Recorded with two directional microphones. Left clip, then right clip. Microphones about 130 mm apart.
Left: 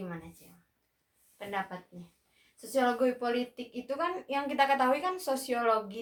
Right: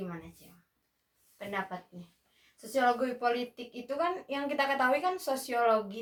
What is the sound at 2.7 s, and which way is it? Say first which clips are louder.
A woman's voice: even; 40° left (ahead or behind).